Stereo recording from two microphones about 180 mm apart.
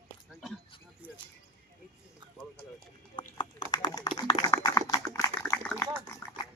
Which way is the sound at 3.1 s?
25° left (ahead or behind).